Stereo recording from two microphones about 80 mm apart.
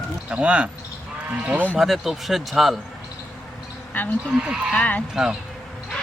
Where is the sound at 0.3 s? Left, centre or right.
Centre.